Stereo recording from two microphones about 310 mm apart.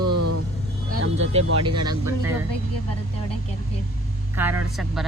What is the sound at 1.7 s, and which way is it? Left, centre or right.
Speech, centre.